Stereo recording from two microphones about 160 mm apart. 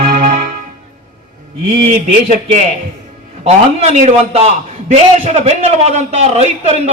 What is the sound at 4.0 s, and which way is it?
A man's voice, 45° right (ahead or behind).